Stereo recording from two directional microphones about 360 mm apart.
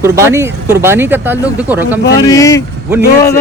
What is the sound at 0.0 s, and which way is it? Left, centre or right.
Speech, centre.